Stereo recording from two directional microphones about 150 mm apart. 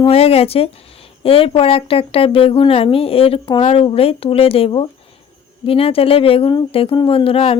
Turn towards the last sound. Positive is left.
turn(degrees=40)  # may be behind; listen again after turning